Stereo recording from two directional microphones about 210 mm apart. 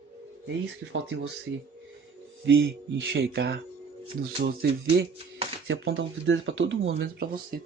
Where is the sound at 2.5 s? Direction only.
60° right (ahead or behind).